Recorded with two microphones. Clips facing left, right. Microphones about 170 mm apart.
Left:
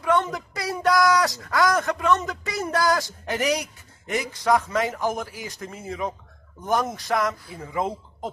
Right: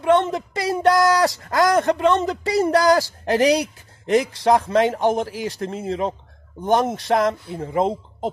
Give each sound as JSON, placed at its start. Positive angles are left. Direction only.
{"t": 0.0, "sound": "speech", "side_deg": -25}